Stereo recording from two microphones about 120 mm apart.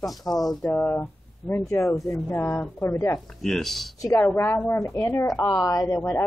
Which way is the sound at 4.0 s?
25° left (ahead or behind).